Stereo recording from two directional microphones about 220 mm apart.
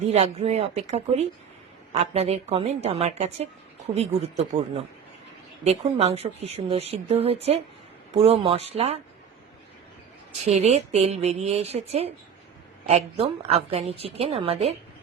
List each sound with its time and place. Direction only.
0.1 s a woman's voice: 30° right (ahead or behind)
10.4 s a woman's voice: 30° right (ahead or behind)